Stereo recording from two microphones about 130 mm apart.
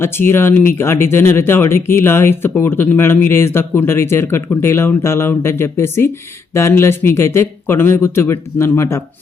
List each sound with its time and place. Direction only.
0.0 s speech: 20° left (ahead or behind)